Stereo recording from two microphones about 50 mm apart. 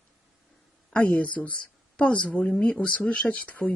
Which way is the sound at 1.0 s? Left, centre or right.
Left.